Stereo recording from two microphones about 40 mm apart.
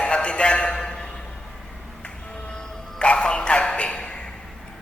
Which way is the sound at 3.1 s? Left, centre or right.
Left.